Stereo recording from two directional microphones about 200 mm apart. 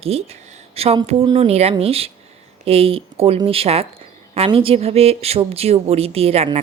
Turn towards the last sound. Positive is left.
turn(degrees=-30)  # may be behind; listen again after turning